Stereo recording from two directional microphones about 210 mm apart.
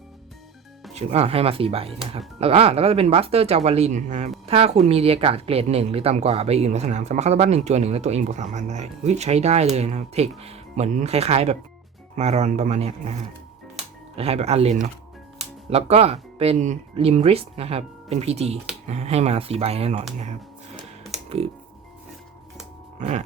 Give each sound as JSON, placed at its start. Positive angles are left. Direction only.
{"t": 0.9, "sound": "speech", "side_deg": -30}
{"t": 14.2, "sound": "speech", "side_deg": -30}
{"t": 20.7, "sound": "typing", "side_deg": 0}
{"t": 21.2, "sound": "speech", "side_deg": -30}
{"t": 23.0, "sound": "a sound", "side_deg": -35}